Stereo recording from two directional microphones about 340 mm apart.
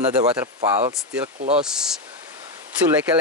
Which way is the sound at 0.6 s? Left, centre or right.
Centre.